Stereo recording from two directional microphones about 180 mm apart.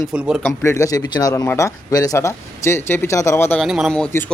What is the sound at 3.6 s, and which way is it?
Speech, centre (ahead or behind).